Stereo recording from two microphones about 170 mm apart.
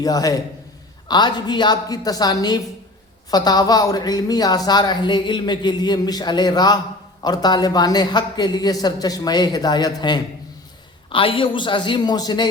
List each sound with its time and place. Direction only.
0.0 s speech: 20° left (ahead or behind)